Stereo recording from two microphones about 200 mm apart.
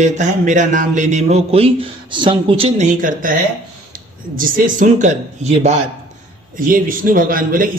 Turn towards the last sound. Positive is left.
turn(degrees=-45)  # may be behind; listen again after turning